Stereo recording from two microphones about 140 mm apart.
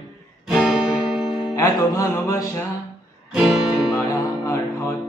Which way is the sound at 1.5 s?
25° left (ahead or behind).